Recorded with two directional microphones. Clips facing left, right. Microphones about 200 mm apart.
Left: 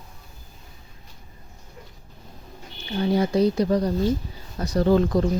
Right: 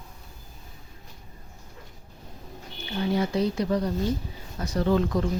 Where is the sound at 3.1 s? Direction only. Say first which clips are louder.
Left 6 dB; 40° left (ahead or behind).